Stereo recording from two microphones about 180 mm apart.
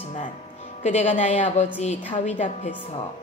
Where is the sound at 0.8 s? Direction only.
40° left (ahead or behind).